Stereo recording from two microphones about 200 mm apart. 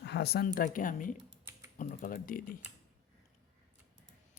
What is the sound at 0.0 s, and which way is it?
Speech, 55° left (ahead or behind).